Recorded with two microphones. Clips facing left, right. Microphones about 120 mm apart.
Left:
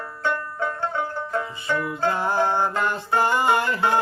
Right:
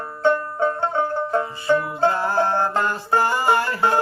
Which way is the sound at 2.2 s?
15° left (ahead or behind).